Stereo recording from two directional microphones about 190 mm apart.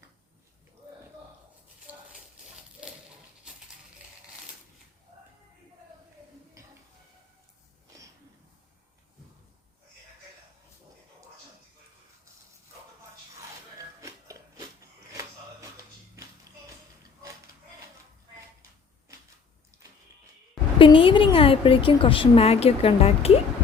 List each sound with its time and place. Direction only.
14.0 s music: 15° right (ahead or behind)
15.1 s a sound: 15° right (ahead or behind)
16.1 s music: 15° right (ahead or behind)
20.7 s a woman's voice: 25° left (ahead or behind)